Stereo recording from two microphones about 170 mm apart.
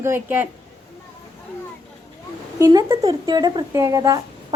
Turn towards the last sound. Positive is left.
turn(degrees=-20)  # may be behind; listen again after turning